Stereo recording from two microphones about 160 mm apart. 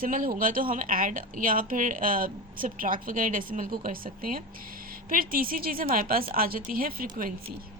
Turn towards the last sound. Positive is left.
turn(degrees=-65)  # may be behind; listen again after turning